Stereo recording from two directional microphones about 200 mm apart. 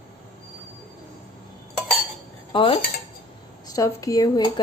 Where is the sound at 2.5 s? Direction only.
25° left (ahead or behind).